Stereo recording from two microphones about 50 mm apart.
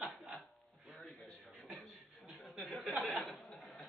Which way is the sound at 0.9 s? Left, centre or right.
Centre.